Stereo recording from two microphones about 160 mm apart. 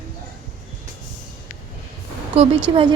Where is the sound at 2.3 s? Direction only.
40° right (ahead or behind).